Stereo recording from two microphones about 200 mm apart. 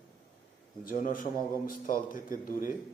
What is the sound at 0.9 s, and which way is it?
Speech, 45° left (ahead or behind).